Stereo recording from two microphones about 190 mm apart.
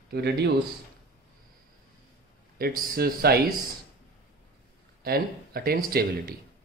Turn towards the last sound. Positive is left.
turn(degrees=-55)  # may be behind; listen again after turning